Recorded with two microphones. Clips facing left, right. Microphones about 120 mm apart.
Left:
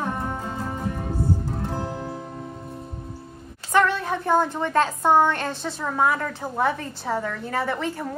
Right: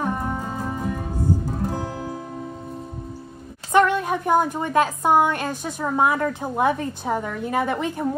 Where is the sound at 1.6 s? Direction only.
5° right (ahead or behind).